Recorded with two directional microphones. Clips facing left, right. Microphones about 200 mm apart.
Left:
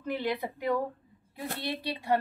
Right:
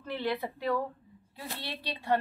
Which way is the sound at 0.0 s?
15° left (ahead or behind).